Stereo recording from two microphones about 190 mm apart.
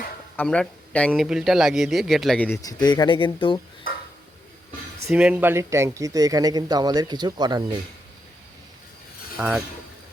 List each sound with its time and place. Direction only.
0.3 s speech: 5° left (ahead or behind)
2.8 s speech: 25° left (ahead or behind)
5.0 s speech: 5° right (ahead or behind); by 7.8 s 20° right (ahead or behind)
9.4 s speech: 5° right (ahead or behind)